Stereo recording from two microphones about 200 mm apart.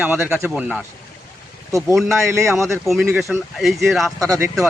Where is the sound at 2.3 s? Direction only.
15° right (ahead or behind).